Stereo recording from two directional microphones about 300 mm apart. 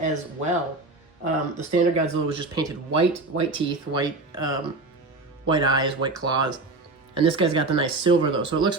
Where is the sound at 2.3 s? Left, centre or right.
Centre.